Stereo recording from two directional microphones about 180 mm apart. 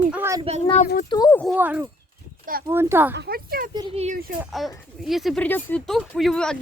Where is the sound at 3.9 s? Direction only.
35° right (ahead or behind).